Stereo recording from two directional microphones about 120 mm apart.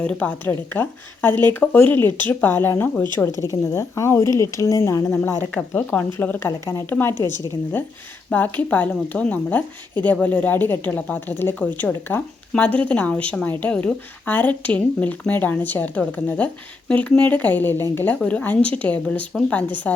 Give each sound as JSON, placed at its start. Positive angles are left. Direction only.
{"t": 0.0, "sound": "speech", "side_deg": 10}
{"t": 8.3, "sound": "speech", "side_deg": 15}